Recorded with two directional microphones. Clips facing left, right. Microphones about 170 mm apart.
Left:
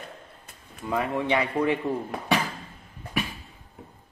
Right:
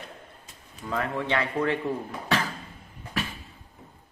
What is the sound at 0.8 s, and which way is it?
Speech, 15° left (ahead or behind).